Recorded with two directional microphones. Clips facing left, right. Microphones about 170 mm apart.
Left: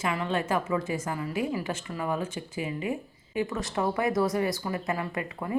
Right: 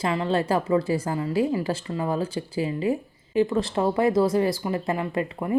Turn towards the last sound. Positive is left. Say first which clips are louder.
# right 6 dB
turn(degrees=-25)  # may be behind; listen again after turning